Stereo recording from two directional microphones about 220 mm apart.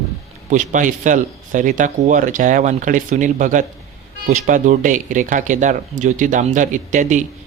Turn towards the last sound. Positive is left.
turn(degrees=-35)  # may be behind; listen again after turning